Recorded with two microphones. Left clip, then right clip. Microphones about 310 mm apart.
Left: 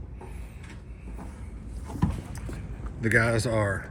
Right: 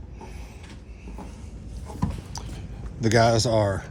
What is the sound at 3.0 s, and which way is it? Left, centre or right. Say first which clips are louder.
Speech: right 4 dB; centre.